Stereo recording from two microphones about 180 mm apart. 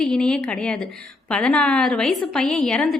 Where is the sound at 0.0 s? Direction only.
5° left (ahead or behind).